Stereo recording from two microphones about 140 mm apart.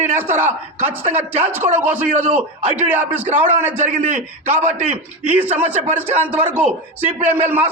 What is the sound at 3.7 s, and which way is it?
Speech, 60° right (ahead or behind).